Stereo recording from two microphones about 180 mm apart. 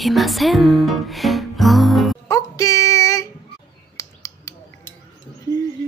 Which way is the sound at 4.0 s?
15° left (ahead or behind).